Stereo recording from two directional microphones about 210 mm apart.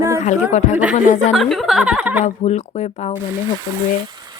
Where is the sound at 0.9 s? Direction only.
35° left (ahead or behind).